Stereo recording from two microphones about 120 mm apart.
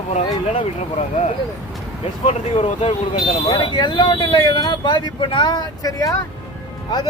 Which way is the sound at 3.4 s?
40° left (ahead or behind).